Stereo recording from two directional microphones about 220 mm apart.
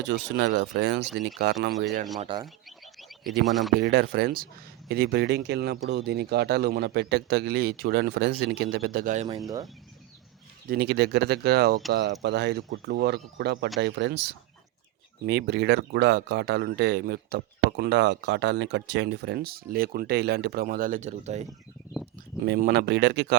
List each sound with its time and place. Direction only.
0.0 s speech: 55° right (ahead or behind)
1.8 s speech: 35° right (ahead or behind)
2.1 s speech: 20° right (ahead or behind)
2.6 s a sound: centre (ahead or behind)
3.8 s speech: 45° right (ahead or behind)
10.7 s speech: 50° right (ahead or behind); by 21.4 s 30° right (ahead or behind)
22.4 s speech: 45° right (ahead or behind)